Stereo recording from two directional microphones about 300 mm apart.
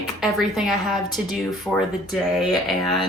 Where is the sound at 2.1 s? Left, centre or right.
Centre.